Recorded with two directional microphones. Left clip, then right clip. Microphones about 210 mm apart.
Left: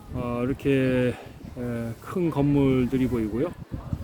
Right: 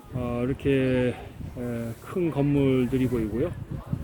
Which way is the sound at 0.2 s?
10° left (ahead or behind).